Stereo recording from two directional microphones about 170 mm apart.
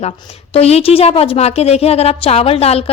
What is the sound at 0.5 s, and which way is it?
Speech, 35° left (ahead or behind).